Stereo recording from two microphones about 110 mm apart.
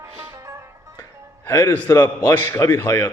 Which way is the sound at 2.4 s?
25° left (ahead or behind).